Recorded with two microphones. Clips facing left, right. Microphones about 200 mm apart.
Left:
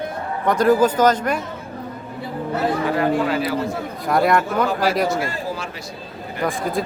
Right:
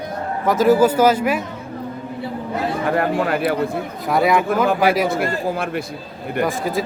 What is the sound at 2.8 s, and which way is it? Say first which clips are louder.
Speech: right 3 dB; 55° right (ahead or behind).